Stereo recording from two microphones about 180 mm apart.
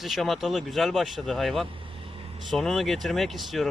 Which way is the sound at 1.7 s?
30° right (ahead or behind).